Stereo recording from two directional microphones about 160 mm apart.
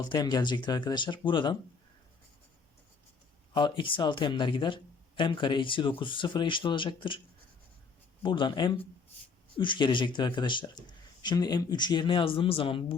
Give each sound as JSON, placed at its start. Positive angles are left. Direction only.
{"t": 0.0, "sound": "speech", "side_deg": 25}
{"t": 3.5, "sound": "speech", "side_deg": 30}
{"t": 8.2, "sound": "speech", "side_deg": 30}